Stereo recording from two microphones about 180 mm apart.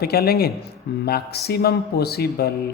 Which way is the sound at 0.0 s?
60° left (ahead or behind).